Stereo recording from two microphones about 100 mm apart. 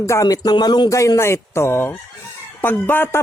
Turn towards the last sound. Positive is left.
turn(degrees=20)  # may be behind; listen again after turning